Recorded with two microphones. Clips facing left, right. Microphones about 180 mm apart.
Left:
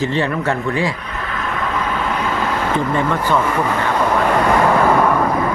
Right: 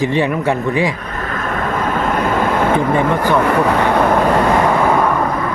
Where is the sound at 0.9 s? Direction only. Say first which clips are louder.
Right 3 dB; 45° right (ahead or behind).